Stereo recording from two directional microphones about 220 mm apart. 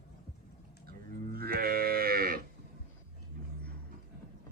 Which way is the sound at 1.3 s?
45° right (ahead or behind).